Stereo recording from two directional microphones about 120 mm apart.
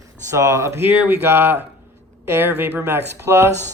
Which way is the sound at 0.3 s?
25° right (ahead or behind).